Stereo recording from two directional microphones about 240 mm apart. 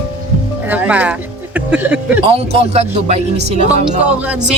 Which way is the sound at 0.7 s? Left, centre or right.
Centre.